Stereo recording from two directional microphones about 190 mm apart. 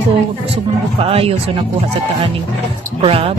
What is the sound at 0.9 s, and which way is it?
Speech, 30° right (ahead or behind).